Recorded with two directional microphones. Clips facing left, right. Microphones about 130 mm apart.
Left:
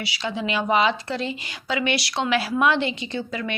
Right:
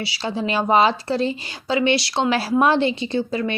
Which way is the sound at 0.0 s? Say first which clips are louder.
Right 3 dB; 30° right (ahead or behind).